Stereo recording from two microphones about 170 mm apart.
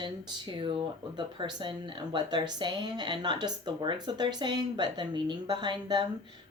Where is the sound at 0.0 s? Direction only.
30° right (ahead or behind).